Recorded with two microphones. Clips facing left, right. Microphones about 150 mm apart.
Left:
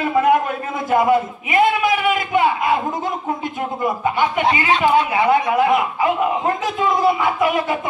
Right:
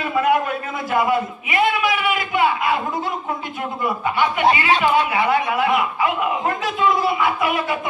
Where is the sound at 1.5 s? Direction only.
45° left (ahead or behind).